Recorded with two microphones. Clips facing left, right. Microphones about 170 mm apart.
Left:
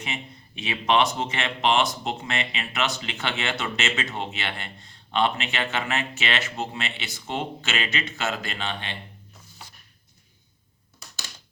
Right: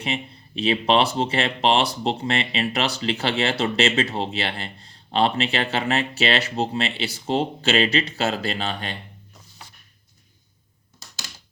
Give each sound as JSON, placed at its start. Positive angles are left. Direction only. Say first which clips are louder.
{"t": 0.0, "sound": "speech", "louder": "right 6 dB", "side_deg": -30}